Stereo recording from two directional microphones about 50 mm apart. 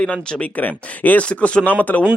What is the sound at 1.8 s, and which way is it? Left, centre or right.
Speech, left.